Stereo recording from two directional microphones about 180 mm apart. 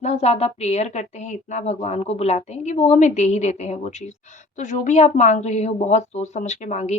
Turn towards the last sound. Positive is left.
turn(degrees=40)  # may be behind; listen again after turning